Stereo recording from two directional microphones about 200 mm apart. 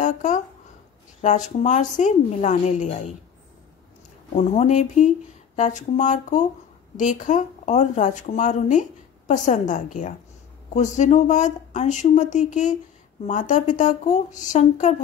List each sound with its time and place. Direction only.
0.0 s a sound: 40° left (ahead or behind)
1.2 s speech: 35° left (ahead or behind)
4.4 s speech: 35° left (ahead or behind)